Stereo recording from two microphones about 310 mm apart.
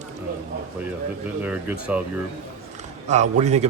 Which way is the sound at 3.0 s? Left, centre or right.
Right.